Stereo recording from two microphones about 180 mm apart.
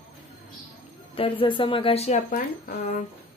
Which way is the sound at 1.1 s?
30° left (ahead or behind).